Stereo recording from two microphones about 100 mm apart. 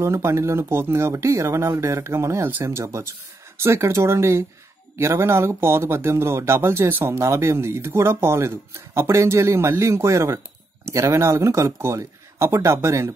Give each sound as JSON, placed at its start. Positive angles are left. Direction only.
{"t": 0.0, "sound": "speech", "side_deg": -25}